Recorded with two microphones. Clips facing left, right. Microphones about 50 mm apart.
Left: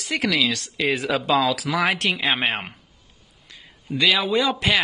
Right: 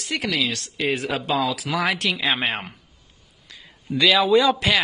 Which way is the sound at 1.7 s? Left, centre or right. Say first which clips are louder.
Left 1 dB; left.